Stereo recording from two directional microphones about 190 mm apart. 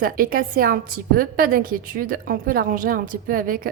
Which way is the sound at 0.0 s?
50° right (ahead or behind).